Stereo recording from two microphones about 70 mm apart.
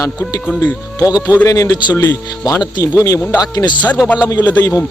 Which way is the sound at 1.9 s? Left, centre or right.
Left.